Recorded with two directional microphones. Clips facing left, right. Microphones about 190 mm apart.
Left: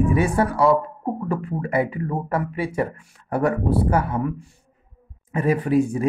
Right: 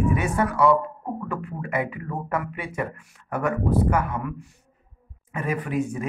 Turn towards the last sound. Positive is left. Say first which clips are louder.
# left 7 dB
turn(degrees=35)  # may be behind; listen again after turning